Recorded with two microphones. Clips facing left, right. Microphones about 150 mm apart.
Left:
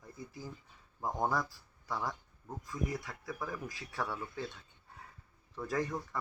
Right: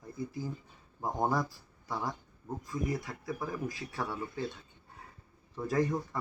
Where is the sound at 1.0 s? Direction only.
20° right (ahead or behind).